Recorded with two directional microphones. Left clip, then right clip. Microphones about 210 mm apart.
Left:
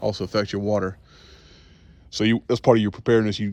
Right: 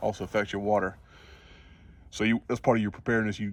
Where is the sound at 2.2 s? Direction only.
5° left (ahead or behind).